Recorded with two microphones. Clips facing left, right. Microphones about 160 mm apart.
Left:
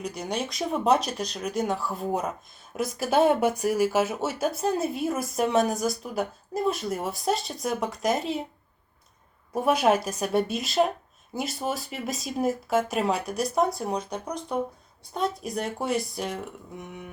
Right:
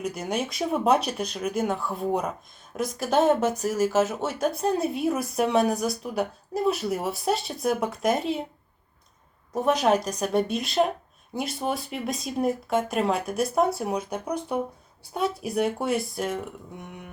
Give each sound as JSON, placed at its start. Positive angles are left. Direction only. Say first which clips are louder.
{"t": 0.0, "sound": "speech", "louder": "right 2 dB", "side_deg": -5}
{"t": 9.5, "sound": "speech", "louder": "even", "side_deg": 10}